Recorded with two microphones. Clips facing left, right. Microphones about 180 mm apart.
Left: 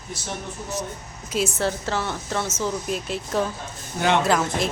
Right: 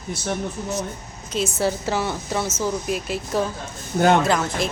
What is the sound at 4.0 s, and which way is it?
Speech, 45° right (ahead or behind).